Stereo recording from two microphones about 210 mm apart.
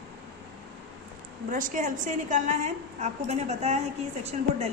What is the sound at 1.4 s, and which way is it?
A woman's voice, 40° right (ahead or behind).